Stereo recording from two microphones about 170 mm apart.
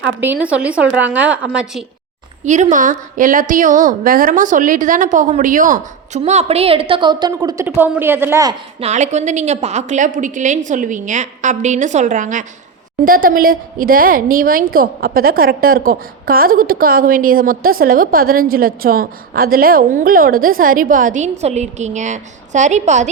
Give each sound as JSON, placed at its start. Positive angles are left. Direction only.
{"t": 0.2, "sound": "a woman's voice", "side_deg": -10}
{"t": 2.4, "sound": "a woman's voice", "side_deg": -45}
{"t": 8.8, "sound": "a woman's voice", "side_deg": -45}